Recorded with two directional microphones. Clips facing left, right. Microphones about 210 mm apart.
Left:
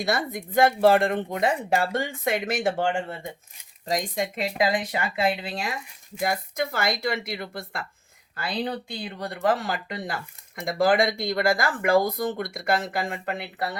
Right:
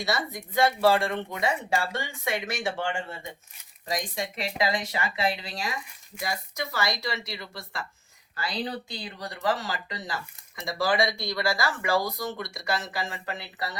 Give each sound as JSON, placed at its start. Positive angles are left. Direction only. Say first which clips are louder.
{"t": 0.0, "sound": "speech", "louder": "left 3 dB", "side_deg": 55}